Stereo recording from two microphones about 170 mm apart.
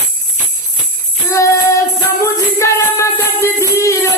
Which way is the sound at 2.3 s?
15° left (ahead or behind).